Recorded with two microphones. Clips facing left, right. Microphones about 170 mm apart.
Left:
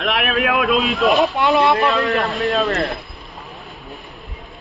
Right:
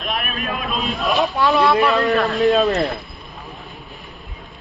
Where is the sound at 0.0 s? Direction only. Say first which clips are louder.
Left 6 dB; 85° left.